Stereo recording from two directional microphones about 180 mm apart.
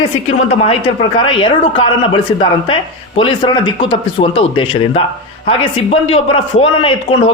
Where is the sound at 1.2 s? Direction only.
30° left (ahead or behind).